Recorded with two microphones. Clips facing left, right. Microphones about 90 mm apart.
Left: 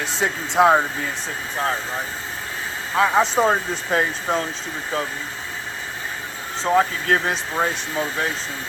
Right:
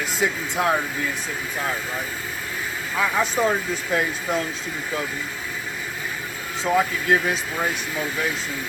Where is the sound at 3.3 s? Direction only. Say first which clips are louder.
Left 3 dB; 30° left (ahead or behind).